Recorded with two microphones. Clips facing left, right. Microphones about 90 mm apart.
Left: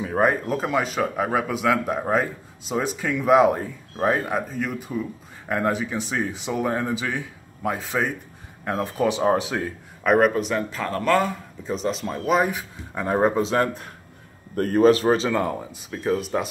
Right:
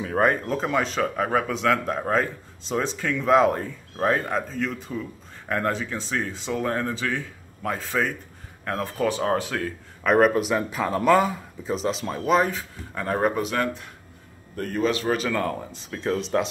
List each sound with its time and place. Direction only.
0.0 s speech: 5° left (ahead or behind)
10.0 s speech: centre (ahead or behind)
12.4 s speech: 15° left (ahead or behind)
14.5 s a man's voice: 40° left (ahead or behind)
15.1 s speech: 25° left (ahead or behind); by 16.4 s 5° left (ahead or behind)